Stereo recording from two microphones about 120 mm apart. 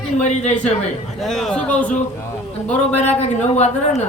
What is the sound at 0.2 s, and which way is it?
Speech, 70° left (ahead or behind).